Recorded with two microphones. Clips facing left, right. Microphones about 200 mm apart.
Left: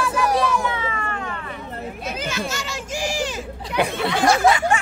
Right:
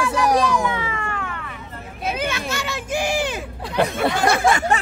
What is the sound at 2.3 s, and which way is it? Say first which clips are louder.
Children playing: right 1 dB; 60° right (ahead or behind).